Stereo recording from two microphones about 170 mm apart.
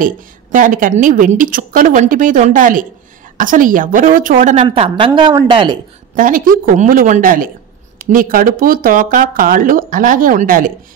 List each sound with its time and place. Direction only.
0.0 s a woman's voice: 50° right (ahead or behind)
4.6 s a woman's voice: 30° right (ahead or behind)
6.1 s speech: 55° right (ahead or behind)